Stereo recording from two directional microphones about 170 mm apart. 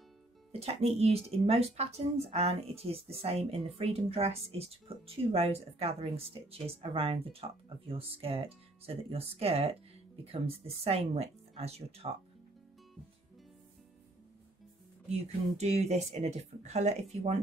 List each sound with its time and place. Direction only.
0.5 s speech: 35° right (ahead or behind)
15.5 s speech: 40° right (ahead or behind)